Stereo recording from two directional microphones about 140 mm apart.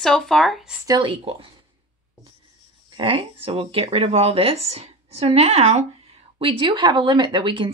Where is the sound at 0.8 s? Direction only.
30° right (ahead or behind).